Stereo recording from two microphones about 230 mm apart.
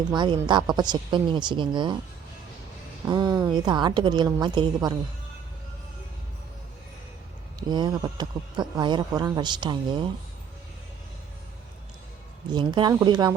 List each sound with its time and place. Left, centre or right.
0.0 s speech: centre
3.1 s speech: centre
7.7 s speech: centre
12.5 s speech: centre